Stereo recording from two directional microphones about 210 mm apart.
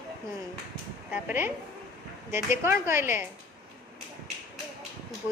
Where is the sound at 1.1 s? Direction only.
10° right (ahead or behind).